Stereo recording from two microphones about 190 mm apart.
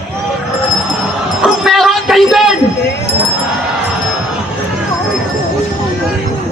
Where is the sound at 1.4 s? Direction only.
Centre (ahead or behind).